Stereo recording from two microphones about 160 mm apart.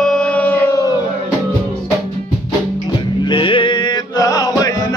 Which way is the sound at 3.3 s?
30° left (ahead or behind).